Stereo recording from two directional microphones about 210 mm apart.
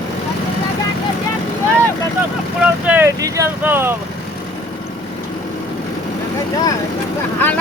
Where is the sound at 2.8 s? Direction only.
10° right (ahead or behind).